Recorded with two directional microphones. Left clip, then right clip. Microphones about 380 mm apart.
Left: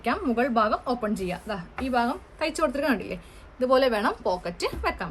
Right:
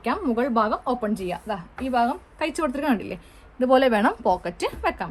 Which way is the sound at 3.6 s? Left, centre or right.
Centre.